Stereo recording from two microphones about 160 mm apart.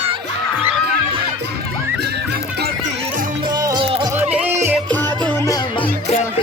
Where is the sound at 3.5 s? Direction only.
25° right (ahead or behind).